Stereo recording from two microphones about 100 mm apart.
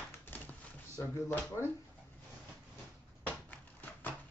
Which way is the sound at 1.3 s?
20° left (ahead or behind).